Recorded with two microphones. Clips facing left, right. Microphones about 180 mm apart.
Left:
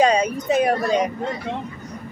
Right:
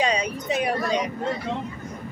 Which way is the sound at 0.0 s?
45° left (ahead or behind).